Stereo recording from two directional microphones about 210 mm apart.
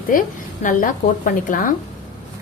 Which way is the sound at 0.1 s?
40° left (ahead or behind).